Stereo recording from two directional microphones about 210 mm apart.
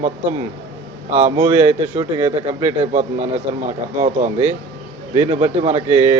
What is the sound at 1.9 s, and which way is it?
Speech, 20° right (ahead or behind).